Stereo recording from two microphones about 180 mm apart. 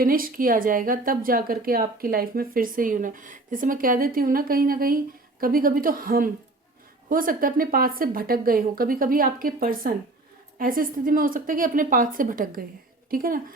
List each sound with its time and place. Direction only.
0.0 s speech: 50° right (ahead or behind)